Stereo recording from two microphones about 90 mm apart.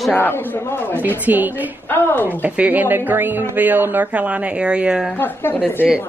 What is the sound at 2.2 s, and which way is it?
Speech, 15° right (ahead or behind).